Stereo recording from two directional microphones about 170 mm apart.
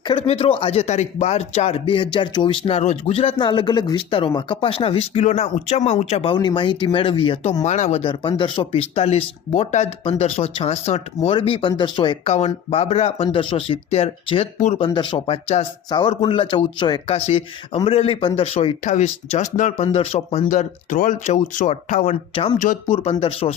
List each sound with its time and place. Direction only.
0.1 s speech: 35° left (ahead or behind)
6.3 s speech: 25° left (ahead or behind)
7.6 s speech: 45° left (ahead or behind)